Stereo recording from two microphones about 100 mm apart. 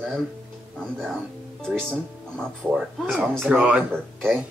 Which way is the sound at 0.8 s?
5° left (ahead or behind).